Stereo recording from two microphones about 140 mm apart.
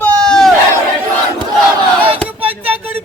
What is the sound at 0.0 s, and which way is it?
Battle cry, 10° left (ahead or behind).